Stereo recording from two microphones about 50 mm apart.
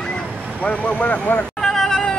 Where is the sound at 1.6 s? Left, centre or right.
Centre.